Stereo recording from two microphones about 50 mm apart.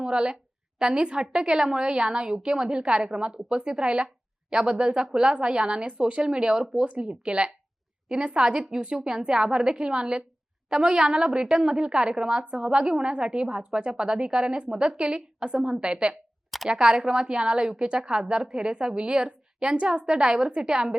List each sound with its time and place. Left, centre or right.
0.0 s a woman's voice: centre